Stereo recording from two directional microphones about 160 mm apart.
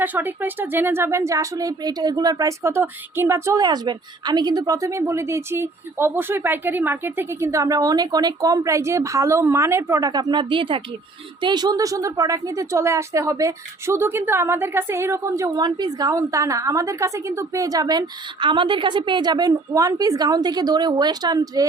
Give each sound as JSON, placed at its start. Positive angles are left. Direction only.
{"t": 0.0, "sound": "a woman's voice", "side_deg": -10}